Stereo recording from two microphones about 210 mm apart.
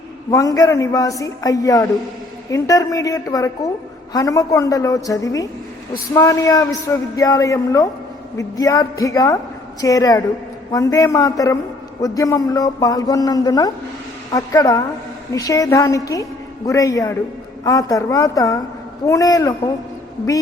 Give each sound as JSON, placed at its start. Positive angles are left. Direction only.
{"t": 0.3, "sound": "a man's voice", "side_deg": 15}